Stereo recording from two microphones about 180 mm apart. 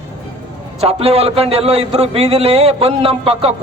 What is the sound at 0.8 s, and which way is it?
A man's voice, 35° right (ahead or behind).